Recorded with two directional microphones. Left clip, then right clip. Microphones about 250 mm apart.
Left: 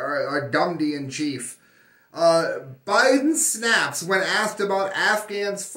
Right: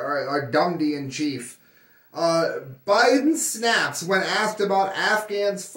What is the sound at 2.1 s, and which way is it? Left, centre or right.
Speech, centre.